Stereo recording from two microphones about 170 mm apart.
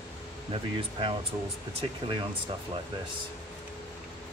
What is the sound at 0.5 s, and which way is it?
Speech, 30° right (ahead or behind).